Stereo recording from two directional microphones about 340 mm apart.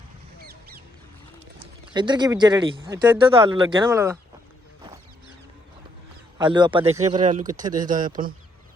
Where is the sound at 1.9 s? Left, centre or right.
Centre.